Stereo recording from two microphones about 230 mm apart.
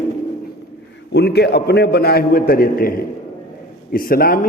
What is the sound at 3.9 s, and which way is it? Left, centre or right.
Speech, left.